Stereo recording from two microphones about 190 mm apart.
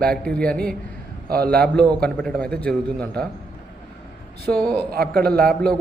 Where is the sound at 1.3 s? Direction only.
55° right (ahead or behind).